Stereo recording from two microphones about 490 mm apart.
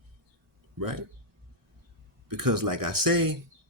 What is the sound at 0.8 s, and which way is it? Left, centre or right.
Speech, right.